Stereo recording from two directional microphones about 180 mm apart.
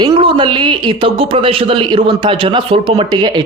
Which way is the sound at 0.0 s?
25° right (ahead or behind).